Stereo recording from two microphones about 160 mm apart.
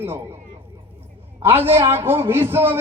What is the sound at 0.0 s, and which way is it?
Speech, 15° right (ahead or behind).